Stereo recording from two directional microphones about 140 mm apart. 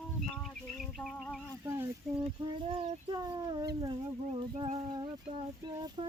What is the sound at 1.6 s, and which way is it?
Speech, 20° right (ahead or behind).